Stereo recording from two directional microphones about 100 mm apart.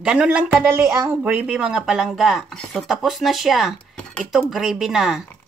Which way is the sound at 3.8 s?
10° left (ahead or behind).